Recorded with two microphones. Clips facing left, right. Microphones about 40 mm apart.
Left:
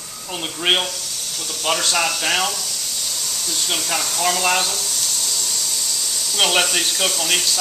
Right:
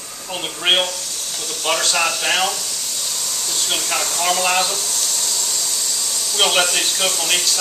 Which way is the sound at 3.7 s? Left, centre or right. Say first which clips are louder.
Right 1 dB; centre.